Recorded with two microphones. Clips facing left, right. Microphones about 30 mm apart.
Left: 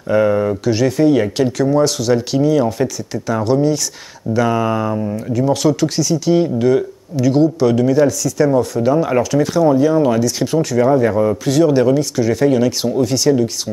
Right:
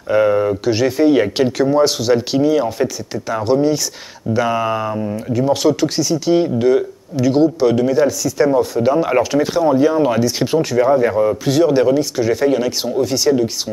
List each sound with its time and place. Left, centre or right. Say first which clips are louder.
0.1 s speech: even; centre